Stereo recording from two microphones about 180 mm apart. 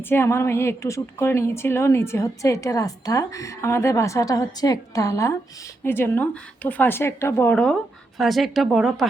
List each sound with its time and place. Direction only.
0.0 s a woman's voice: 15° left (ahead or behind)